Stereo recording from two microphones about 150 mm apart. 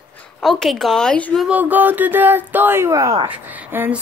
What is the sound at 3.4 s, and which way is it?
Speech, 10° right (ahead or behind).